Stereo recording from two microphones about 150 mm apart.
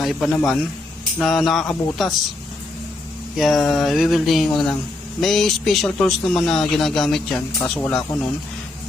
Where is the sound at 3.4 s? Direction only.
Centre (ahead or behind).